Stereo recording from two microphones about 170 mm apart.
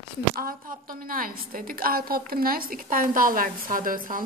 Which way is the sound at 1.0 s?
55° right (ahead or behind).